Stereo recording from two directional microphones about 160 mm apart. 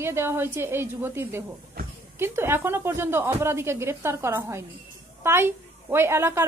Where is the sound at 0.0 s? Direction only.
15° right (ahead or behind).